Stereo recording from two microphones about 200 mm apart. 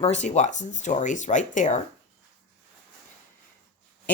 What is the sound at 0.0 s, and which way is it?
Speech, 35° left (ahead or behind).